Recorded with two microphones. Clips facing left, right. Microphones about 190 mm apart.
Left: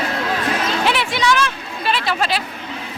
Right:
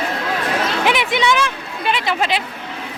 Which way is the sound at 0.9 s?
20° right (ahead or behind).